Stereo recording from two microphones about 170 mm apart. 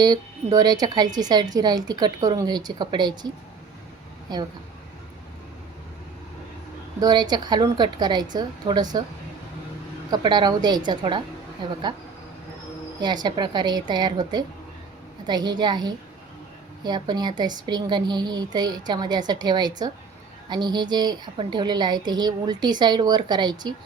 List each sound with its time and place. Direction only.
0.0 s a woman's voice: 20° right (ahead or behind)
7.0 s a woman's voice: 25° right (ahead or behind)
10.1 s a woman's voice: 25° right (ahead or behind)
13.0 s a woman's voice: 25° right (ahead or behind)